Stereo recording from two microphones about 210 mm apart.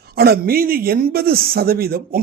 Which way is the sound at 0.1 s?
45° right (ahead or behind).